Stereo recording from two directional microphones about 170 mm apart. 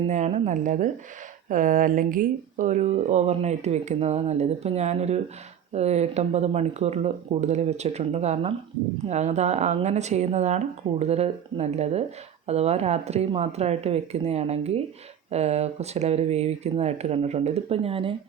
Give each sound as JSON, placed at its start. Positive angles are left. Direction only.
{"t": 0.1, "sound": "speech", "side_deg": -45}